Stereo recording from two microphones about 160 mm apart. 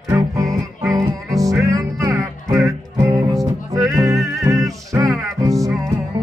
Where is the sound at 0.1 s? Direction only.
20° right (ahead or behind).